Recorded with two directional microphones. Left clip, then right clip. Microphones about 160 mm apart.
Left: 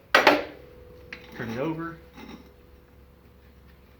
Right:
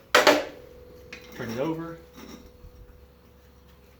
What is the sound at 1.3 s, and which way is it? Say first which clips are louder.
Speech: right 1 dB; 10° right (ahead or behind).